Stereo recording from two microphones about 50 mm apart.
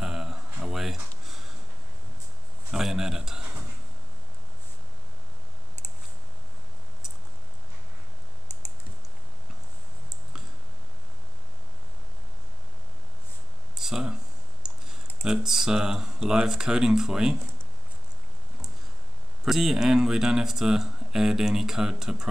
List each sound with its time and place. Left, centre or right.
0.0 s a sound: centre
2.7 s speech: centre
13.7 s a sound: centre
14.6 s typing: centre
15.2 s speech: centre
19.4 s speech: centre